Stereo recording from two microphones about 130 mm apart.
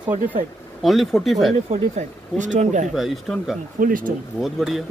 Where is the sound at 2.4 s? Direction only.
70° right (ahead or behind).